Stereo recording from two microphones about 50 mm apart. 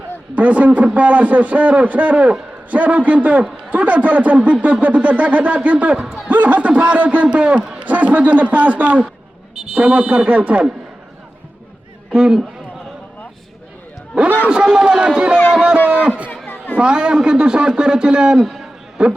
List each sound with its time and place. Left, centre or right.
0.3 s a man's voice: right
9.7 s a man's voice: centre
10.2 s a man's voice: right
12.1 s a man's voice: centre
14.5 s a man's voice: centre
15.9 s a sound: right
16.7 s a man's voice: centre
18.4 s a sound: centre
19.0 s a man's voice: centre